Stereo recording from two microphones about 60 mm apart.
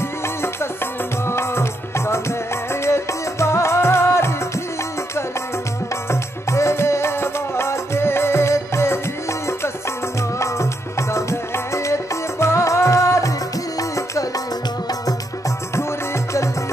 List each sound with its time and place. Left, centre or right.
1.2 s music: left
6.0 s music: left
10.4 s music: left